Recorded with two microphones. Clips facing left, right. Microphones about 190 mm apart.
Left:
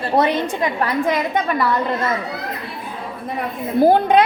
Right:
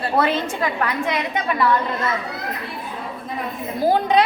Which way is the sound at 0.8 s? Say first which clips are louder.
Left 4 dB; 35° left (ahead or behind).